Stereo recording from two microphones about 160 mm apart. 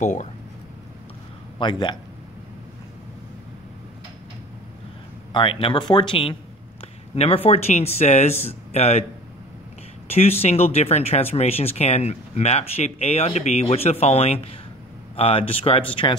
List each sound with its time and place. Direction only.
0.0 s speech: 50° left (ahead or behind)
1.6 s speech: 30° left (ahead or behind)
5.3 s speech: 35° left (ahead or behind)
10.0 s speech: 40° left (ahead or behind)